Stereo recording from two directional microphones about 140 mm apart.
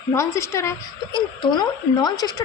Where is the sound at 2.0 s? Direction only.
30° left (ahead or behind).